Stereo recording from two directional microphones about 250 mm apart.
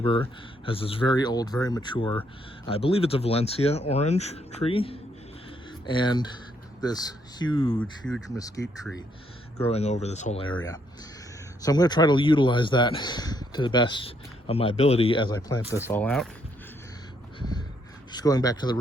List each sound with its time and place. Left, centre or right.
0.0 s speech: left
7.8 s speech: centre
8.4 s speech: centre
9.6 s speech: left; by 16.3 s centre
18.1 s speech: centre